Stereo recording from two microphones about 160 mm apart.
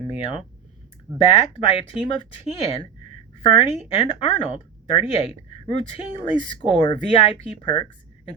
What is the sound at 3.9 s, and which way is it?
Speech, 40° left (ahead or behind).